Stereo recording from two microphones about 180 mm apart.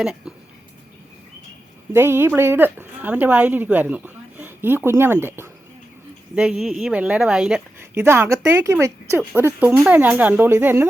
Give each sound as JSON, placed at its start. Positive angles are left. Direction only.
{"t": 0.0, "sound": "speech", "side_deg": -5}
{"t": 1.9, "sound": "a woman's voice", "side_deg": -15}